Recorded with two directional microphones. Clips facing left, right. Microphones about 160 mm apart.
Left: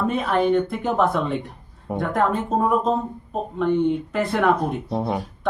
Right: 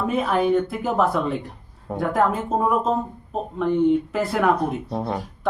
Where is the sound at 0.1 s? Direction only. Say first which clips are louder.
Right 2 dB; 5° right (ahead or behind).